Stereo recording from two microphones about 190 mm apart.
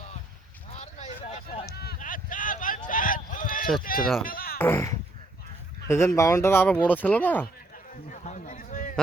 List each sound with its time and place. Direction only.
0.7 s vehicle: 35° left (ahead or behind)
1.8 s a sound: 50° left (ahead or behind)
3.9 s speech: 45° left (ahead or behind)
4.2 s music: 50° left (ahead or behind)
4.5 s speech: 10° left (ahead or behind)
8.1 s a sound: 40° left (ahead or behind)